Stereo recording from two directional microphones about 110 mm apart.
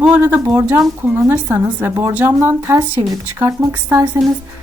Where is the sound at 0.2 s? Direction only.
20° right (ahead or behind).